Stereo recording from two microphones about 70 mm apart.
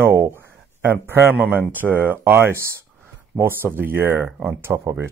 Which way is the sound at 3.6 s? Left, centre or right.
Right.